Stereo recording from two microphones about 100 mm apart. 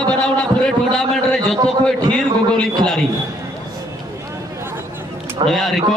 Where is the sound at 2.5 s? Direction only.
5° left (ahead or behind).